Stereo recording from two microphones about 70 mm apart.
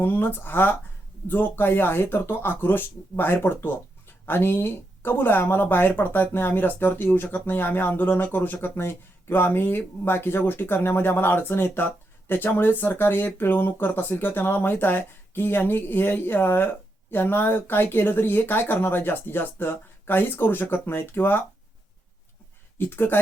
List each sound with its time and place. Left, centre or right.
0.0 s speech: left
22.8 s speech: left